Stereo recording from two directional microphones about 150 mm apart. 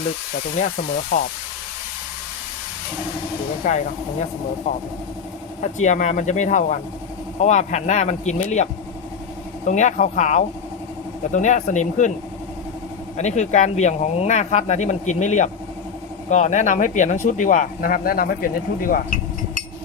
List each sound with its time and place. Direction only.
0.6 s speech: 55° left (ahead or behind)
3.6 s speech: 60° left (ahead or behind)
5.6 s speech: 55° left (ahead or behind)
13.1 s speech: 50° left (ahead or behind)